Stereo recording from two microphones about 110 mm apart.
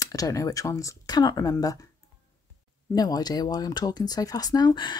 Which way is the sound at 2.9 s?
35° left (ahead or behind).